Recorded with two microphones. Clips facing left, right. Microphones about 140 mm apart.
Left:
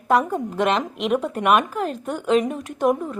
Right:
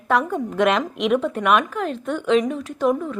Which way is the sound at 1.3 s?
40° left (ahead or behind).